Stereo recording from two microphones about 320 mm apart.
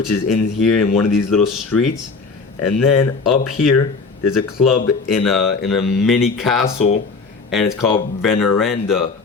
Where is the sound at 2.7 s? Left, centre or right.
Left.